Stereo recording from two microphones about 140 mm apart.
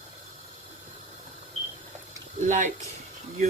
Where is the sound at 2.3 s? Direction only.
60° right (ahead or behind).